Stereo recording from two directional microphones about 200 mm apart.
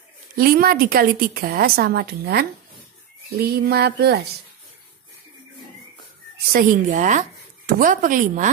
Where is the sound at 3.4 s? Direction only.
55° right (ahead or behind).